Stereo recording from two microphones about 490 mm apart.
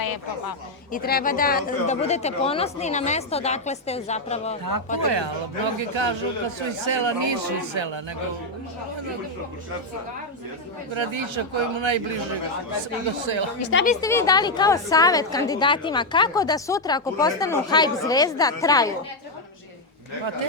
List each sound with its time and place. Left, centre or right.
0.0 s a woman's voice: left
0.9 s a woman's voice: centre
4.9 s speech: right
10.9 s speech: right
13.6 s a woman's voice: left
13.8 s a woman's voice: centre